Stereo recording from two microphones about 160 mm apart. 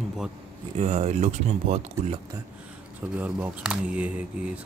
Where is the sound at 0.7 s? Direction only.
40° right (ahead or behind).